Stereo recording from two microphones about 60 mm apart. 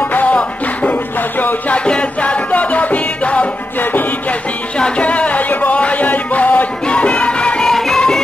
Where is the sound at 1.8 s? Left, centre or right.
Centre.